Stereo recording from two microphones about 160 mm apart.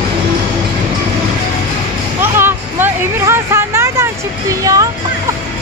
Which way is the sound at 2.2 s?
15° right (ahead or behind).